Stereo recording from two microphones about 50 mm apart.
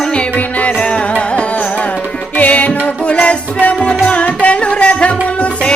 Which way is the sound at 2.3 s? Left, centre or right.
Left.